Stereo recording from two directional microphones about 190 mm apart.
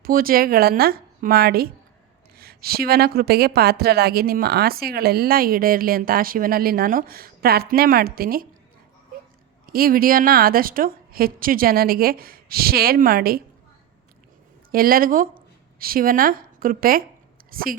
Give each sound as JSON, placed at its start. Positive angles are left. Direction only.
{"t": 0.0, "sound": "speech", "side_deg": -50}
{"t": 9.6, "sound": "speech", "side_deg": -50}
{"t": 14.7, "sound": "a woman's voice", "side_deg": -50}